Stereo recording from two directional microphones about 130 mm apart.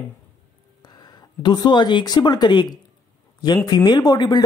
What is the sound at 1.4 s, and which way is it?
Speech, 35° left (ahead or behind).